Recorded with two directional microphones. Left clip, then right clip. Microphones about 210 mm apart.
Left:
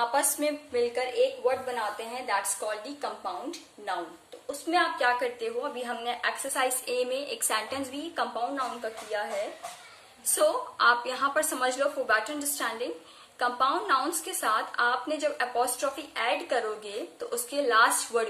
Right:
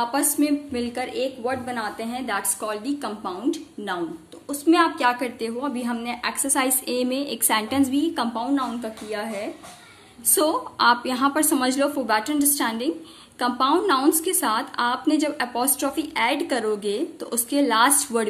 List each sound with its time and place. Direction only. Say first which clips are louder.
0.4 s a woman's voice: right 3 dB; 45° right (ahead or behind)
9.1 s a woman's voice: right 2 dB; 50° right (ahead or behind)
10.3 s a woman's voice: right 3 dB; 50° right (ahead or behind)